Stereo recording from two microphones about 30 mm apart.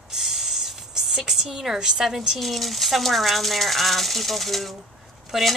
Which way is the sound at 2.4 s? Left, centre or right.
Centre.